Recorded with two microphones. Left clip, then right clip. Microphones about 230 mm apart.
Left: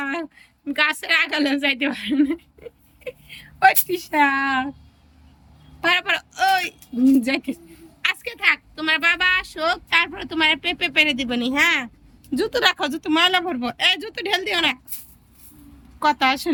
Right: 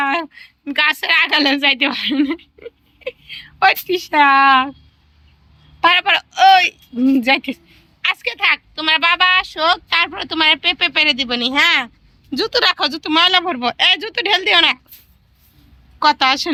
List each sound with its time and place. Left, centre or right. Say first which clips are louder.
0.0 s a woman's voice: right 9 dB; centre
5.8 s speech: right 7 dB; centre
16.0 s speech: right 5 dB; centre